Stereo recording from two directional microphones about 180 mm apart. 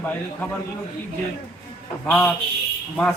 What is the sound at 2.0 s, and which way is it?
Speech, 5° left (ahead or behind).